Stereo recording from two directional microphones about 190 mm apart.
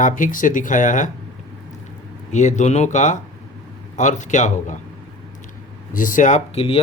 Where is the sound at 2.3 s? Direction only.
40° left (ahead or behind).